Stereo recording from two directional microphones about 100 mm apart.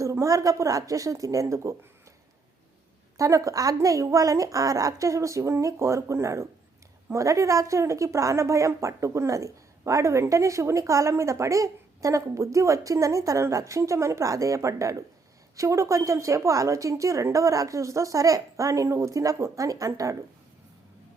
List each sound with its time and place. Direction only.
0.0 s a woman's voice: 30° right (ahead or behind)
3.2 s a woman's voice: 35° right (ahead or behind)